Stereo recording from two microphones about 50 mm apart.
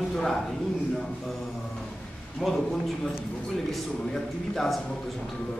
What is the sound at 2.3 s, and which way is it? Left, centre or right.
Speech, centre.